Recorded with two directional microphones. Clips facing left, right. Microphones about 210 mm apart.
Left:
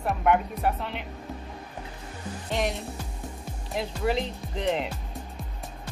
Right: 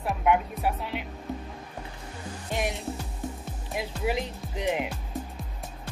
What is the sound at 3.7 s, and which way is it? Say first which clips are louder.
Speech: left 2 dB; 10° right (ahead or behind).